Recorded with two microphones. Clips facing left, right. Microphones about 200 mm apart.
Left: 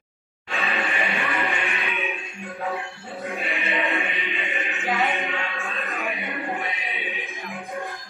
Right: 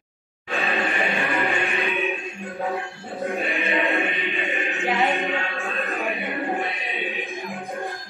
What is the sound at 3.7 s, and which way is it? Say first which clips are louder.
Music: right 3 dB; centre (ahead or behind).